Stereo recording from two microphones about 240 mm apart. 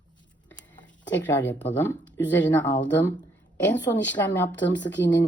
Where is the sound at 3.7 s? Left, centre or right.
Centre.